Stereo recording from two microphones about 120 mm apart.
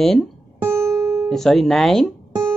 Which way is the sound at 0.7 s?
25° right (ahead or behind).